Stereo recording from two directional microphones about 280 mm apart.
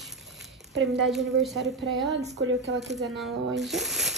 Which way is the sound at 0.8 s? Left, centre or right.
Centre.